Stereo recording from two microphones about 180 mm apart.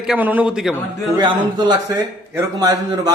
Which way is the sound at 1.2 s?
25° right (ahead or behind).